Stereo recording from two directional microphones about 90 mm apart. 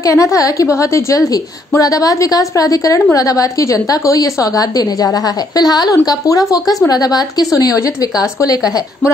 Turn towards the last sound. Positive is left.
turn(degrees=45)  # may be behind; listen again after turning